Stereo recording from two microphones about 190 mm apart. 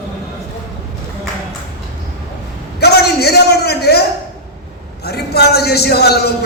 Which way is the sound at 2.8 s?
55° left (ahead or behind).